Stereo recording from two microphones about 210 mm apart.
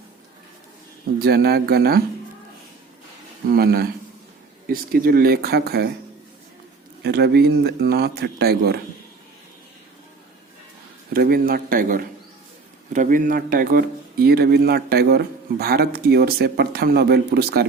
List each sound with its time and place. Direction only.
1.2 s speech: 50° right (ahead or behind)
3.5 s speech: 45° right (ahead or behind)
7.0 s speech: 50° right (ahead or behind)
11.1 s speech: 45° right (ahead or behind)